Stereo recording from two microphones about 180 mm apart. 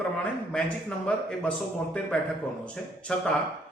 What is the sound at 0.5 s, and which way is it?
A man's voice, 5° left (ahead or behind).